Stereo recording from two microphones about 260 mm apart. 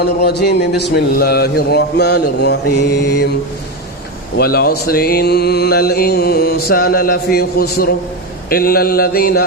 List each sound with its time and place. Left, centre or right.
0.0 s mantra: left
4.4 s mantra: left